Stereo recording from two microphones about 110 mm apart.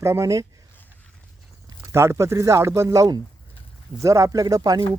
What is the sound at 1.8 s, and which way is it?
Speech, 25° right (ahead or behind).